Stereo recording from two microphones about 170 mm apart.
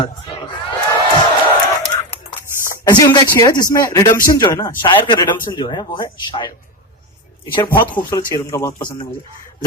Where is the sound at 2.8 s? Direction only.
25° left (ahead or behind).